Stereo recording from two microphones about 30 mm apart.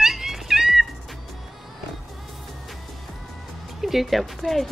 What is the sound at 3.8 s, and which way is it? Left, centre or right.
Speech, centre.